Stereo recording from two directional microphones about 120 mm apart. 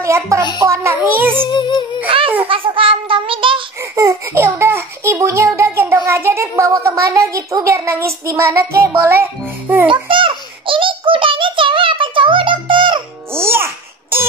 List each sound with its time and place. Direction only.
0.0 s a child's voice: 25° right (ahead or behind)
1.4 s music: 40° left (ahead or behind)
2.0 s a sound: 45° right (ahead or behind)
3.9 s a child's voice: 25° right (ahead or behind)
9.8 s a sound: 45° right (ahead or behind)
13.3 s music: 20° right (ahead or behind)